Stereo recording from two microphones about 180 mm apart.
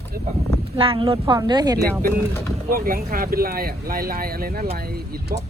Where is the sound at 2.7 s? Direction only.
55° right (ahead or behind).